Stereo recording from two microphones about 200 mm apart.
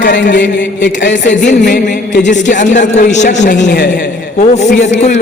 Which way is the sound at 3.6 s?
60° left (ahead or behind).